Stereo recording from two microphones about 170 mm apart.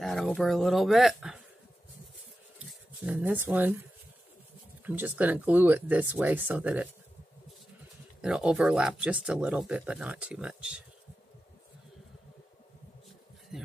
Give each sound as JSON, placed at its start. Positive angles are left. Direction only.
{"t": 0.0, "sound": "speech", "side_deg": 0}
{"t": 2.6, "sound": "speech", "side_deg": -10}
{"t": 4.8, "sound": "speech", "side_deg": -10}
{"t": 8.2, "sound": "speech", "side_deg": -5}
{"t": 13.5, "sound": "speech", "side_deg": -5}